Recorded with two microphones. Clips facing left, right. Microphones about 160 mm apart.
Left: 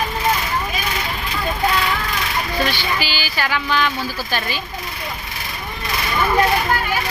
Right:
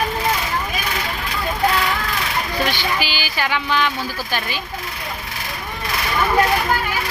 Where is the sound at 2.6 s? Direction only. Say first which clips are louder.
Even; 15° right (ahead or behind).